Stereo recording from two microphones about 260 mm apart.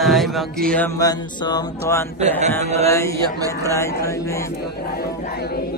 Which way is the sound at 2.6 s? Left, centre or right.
Right.